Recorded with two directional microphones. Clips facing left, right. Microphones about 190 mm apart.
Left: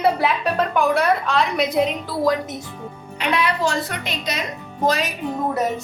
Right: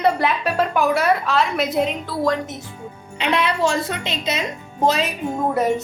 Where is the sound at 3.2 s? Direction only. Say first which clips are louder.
Right 1 dB; 25° right (ahead or behind).